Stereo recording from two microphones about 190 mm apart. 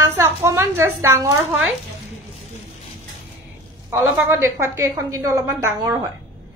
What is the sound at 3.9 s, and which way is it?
A woman's voice, 15° right (ahead or behind).